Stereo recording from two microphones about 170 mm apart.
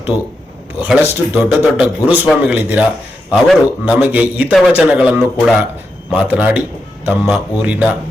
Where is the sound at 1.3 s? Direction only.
10° right (ahead or behind).